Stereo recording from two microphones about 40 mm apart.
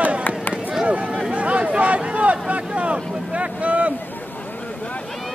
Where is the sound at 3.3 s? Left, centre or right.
Right.